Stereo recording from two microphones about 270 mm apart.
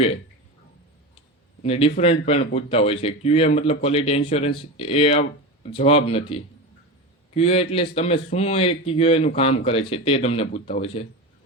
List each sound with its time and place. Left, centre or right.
1.6 s a man's voice: left